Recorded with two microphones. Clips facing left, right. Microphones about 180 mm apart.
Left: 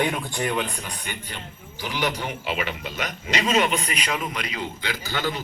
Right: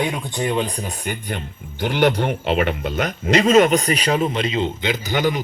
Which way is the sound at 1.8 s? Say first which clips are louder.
Right 9 dB; 60° right (ahead or behind).